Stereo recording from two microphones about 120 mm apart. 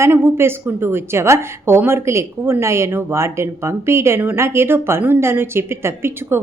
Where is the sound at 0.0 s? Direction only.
20° right (ahead or behind).